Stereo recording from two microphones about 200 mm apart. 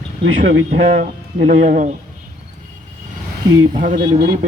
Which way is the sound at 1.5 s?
40° right (ahead or behind).